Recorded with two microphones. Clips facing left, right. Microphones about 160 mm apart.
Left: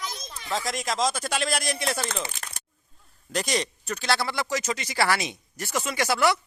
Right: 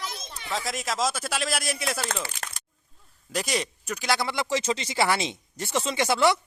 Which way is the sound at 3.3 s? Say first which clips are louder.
Left 1 dB; 5° right (ahead or behind).